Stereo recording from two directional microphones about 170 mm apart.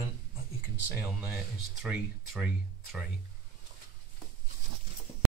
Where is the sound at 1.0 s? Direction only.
10° right (ahead or behind).